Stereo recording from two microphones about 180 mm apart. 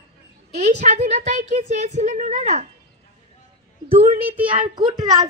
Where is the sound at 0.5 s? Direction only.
40° right (ahead or behind).